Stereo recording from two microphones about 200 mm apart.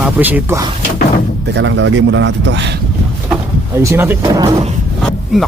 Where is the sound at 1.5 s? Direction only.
65° right (ahead or behind).